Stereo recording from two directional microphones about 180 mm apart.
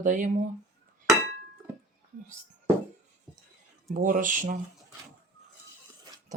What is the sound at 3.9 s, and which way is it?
Speech, 50° right (ahead or behind).